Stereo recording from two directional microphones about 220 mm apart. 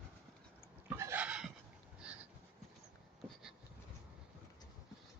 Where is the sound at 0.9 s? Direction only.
10° right (ahead or behind).